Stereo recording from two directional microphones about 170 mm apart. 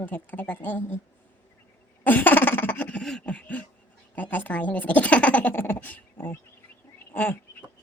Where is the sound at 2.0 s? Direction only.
10° left (ahead or behind).